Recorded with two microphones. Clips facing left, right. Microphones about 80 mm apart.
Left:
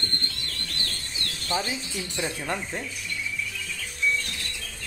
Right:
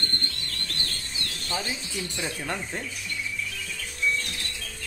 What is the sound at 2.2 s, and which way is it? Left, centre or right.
Speech, centre.